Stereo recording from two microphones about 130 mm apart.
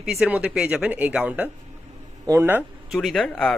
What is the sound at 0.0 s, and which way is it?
Speech, 5° right (ahead or behind).